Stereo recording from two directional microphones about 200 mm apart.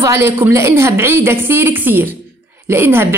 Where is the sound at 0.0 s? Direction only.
15° right (ahead or behind).